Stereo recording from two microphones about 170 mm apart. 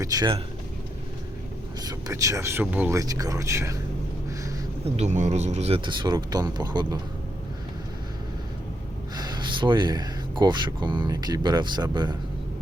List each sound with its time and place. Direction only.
0.0 s speech: 20° right (ahead or behind)
1.8 s speech: 20° right (ahead or behind)
4.9 s speech: 45° right (ahead or behind); by 7.0 s 25° right (ahead or behind)
9.1 s speech: 25° right (ahead or behind)